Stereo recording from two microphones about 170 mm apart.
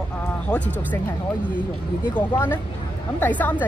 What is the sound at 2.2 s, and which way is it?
Speech, 10° left (ahead or behind).